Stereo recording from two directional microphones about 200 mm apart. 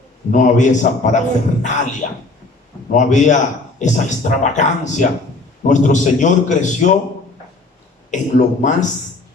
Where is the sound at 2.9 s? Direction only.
35° left (ahead or behind).